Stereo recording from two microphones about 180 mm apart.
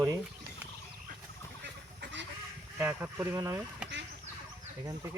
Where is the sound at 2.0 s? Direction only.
80° right.